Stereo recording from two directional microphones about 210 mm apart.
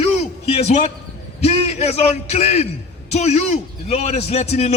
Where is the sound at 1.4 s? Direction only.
30° left (ahead or behind).